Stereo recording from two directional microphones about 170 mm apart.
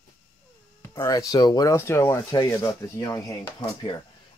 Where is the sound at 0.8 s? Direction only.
20° left (ahead or behind).